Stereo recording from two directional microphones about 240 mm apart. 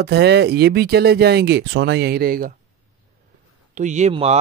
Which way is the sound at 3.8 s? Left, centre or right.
Right.